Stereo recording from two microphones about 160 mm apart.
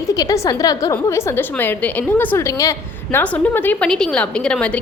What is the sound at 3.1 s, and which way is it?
A woman's voice, 10° left (ahead or behind).